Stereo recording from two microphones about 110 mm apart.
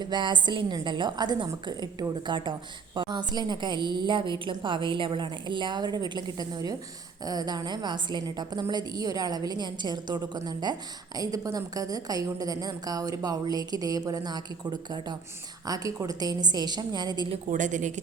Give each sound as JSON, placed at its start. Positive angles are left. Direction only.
{"t": 0.0, "sound": "a woman's voice", "side_deg": -45}
{"t": 17.7, "sound": "speech", "side_deg": -90}